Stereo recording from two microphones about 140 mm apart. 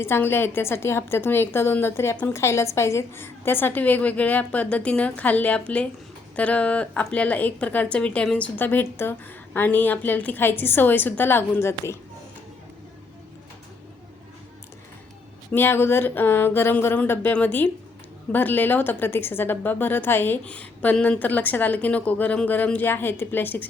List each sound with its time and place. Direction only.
0.0 s a woman's voice: 15° left (ahead or behind)
15.5 s a woman's voice: 15° left (ahead or behind)